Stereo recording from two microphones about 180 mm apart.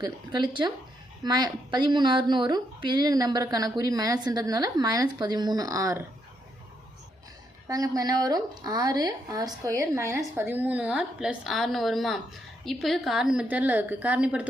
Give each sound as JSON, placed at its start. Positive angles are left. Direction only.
{"t": 0.0, "sound": "a woman's voice", "side_deg": -25}
{"t": 7.7, "sound": "a woman's voice", "side_deg": -20}